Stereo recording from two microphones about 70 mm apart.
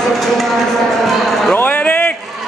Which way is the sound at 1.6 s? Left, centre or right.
Left.